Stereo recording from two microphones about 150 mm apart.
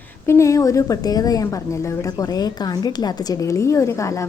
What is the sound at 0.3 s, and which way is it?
A woman's voice, 20° left (ahead or behind).